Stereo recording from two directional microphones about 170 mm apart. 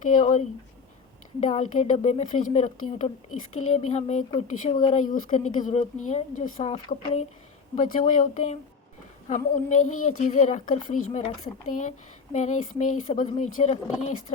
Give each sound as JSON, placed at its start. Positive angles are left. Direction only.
{"t": 0.0, "sound": "speech", "side_deg": 50}
{"t": 1.5, "sound": "speech", "side_deg": 40}